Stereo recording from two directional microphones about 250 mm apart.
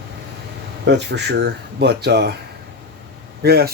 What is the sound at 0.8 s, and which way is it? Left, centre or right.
Speech, right.